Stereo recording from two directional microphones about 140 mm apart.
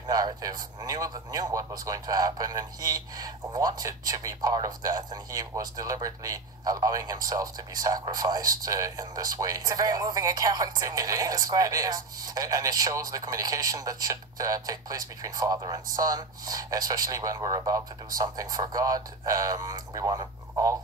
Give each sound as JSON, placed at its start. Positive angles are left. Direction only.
{"t": 0.0, "sound": "a man's voice", "side_deg": -25}